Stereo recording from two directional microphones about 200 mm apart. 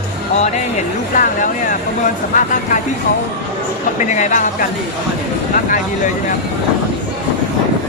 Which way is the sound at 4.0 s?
40° left (ahead or behind).